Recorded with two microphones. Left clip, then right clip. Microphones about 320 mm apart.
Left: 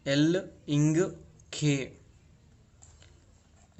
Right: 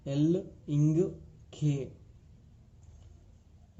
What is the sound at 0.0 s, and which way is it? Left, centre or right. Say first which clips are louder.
Speech: left 4 dB; left.